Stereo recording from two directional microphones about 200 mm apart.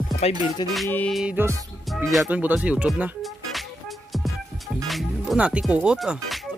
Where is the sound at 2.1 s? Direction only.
5° right (ahead or behind).